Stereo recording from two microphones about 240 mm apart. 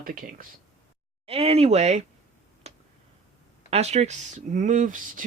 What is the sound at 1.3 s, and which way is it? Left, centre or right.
Speech, right.